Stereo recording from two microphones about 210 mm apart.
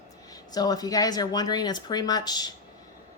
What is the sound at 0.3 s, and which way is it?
Speech, 20° left (ahead or behind).